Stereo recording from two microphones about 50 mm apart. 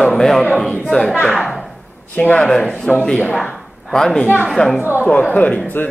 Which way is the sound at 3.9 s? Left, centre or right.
Centre.